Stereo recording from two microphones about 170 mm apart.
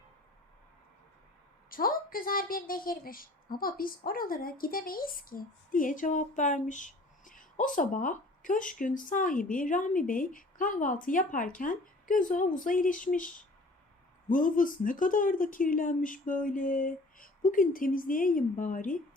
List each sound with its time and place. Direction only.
1.7 s a woman's voice: 55° left (ahead or behind)